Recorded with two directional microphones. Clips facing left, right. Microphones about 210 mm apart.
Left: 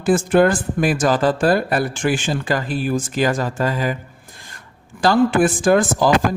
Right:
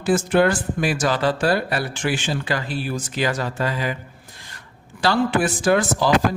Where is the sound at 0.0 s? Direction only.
50° left (ahead or behind).